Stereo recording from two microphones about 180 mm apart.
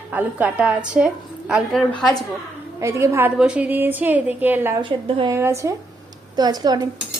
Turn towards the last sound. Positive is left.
turn(degrees=-20)  # may be behind; listen again after turning